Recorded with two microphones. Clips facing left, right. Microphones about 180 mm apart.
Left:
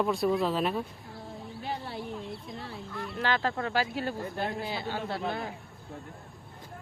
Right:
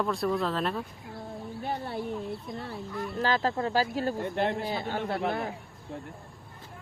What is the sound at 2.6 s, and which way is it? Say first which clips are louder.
A man's voice: right 3 dB; 50° right (ahead or behind).